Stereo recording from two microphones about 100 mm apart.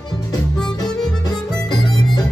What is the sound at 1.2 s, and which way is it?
Music, 45° left (ahead or behind).